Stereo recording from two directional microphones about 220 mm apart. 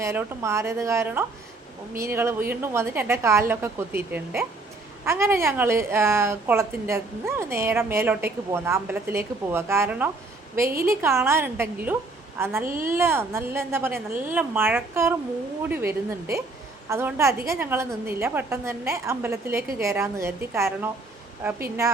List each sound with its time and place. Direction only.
0.0 s a woman's voice: 10° right (ahead or behind)
12.6 s speech: 40° right (ahead or behind)
12.9 s a woman's voice: 10° right (ahead or behind)